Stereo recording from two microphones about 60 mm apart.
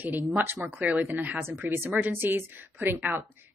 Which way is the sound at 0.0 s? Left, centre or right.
Right.